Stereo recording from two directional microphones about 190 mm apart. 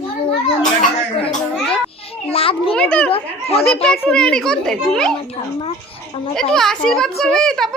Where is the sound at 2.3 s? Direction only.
30° left (ahead or behind).